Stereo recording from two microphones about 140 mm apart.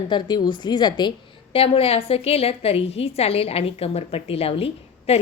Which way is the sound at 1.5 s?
45° left (ahead or behind).